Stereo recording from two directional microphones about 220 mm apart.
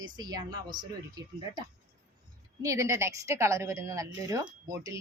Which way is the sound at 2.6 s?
15° right (ahead or behind).